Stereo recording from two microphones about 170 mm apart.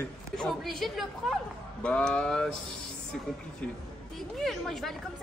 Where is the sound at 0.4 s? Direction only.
Centre (ahead or behind).